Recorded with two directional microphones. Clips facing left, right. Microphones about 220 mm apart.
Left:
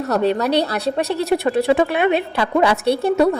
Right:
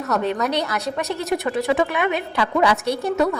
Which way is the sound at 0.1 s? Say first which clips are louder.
Left 4 dB; 35° left (ahead or behind).